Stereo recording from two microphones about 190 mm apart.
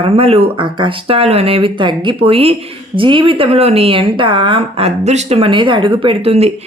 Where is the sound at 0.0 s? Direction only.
30° right (ahead or behind).